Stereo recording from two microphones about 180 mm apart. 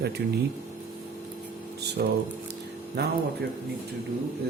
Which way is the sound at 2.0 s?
65° right (ahead or behind).